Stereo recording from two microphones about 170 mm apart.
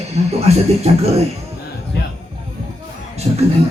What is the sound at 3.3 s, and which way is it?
Speech, 35° right (ahead or behind).